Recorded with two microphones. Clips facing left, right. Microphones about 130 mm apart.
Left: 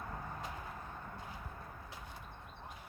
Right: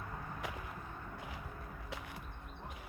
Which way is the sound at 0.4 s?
90° right.